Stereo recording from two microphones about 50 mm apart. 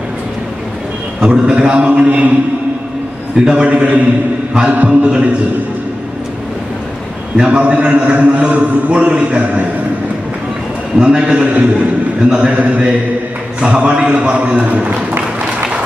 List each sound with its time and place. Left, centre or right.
1.2 s a man's voice: right
3.3 s a man's voice: centre
7.3 s a man's voice: centre
11.0 s a man's voice: right